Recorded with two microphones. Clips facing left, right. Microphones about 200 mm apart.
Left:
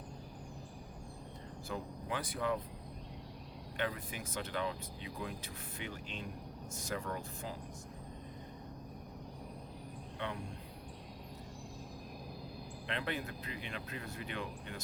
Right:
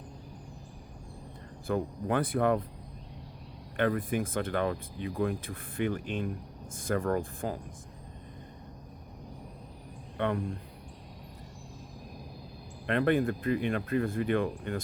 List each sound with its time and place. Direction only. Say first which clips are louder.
1.6 s speech: right 12 dB; 55° right (ahead or behind)
3.8 s speech: right 11 dB; 55° right (ahead or behind)
10.2 s speech: right 11 dB; 55° right (ahead or behind)
12.9 s speech: right 14 dB; 55° right (ahead or behind)